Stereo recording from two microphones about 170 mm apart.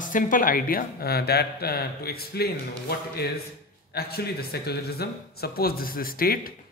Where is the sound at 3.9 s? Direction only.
70° left (ahead or behind).